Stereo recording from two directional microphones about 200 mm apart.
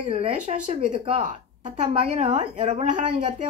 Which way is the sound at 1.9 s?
30° right (ahead or behind).